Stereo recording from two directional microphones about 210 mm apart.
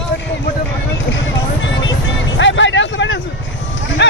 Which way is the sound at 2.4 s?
60° left (ahead or behind).